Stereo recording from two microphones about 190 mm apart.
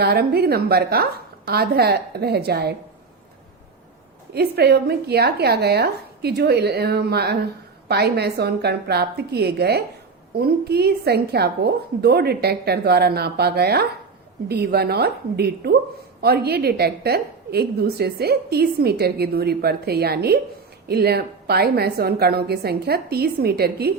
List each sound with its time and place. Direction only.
0.0 s a woman's voice: 55° right (ahead or behind)
4.4 s a woman's voice: 55° right (ahead or behind)